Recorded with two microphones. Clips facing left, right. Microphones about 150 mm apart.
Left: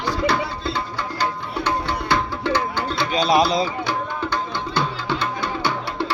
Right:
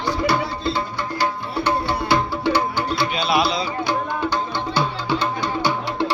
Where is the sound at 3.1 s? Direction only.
40° left (ahead or behind).